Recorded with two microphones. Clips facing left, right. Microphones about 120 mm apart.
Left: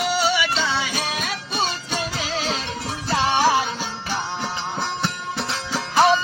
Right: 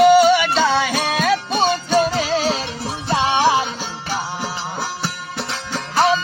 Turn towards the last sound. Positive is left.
turn(degrees=0)  # may be behind; listen again after turning